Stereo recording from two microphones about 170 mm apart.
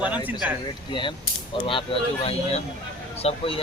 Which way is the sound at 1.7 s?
30° left (ahead or behind).